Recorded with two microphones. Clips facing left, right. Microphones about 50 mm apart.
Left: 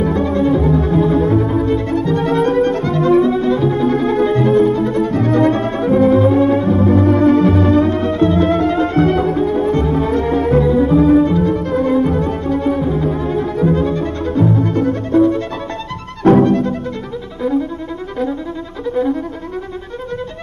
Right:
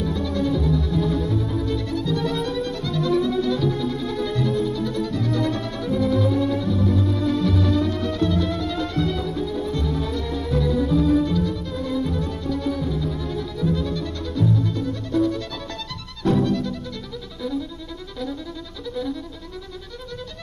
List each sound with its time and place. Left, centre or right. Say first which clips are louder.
0.0 s music: left 9 dB; left